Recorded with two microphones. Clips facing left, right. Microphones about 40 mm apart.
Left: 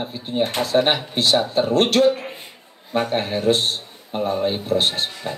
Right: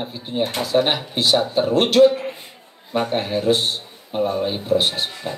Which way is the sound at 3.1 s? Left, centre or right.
Left.